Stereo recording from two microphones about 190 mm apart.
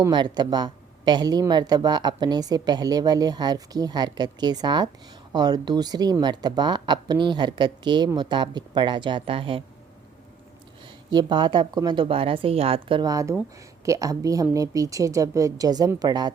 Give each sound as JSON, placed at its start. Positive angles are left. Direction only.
{"t": 0.0, "sound": "speech", "side_deg": -25}
{"t": 11.1, "sound": "speech", "side_deg": -25}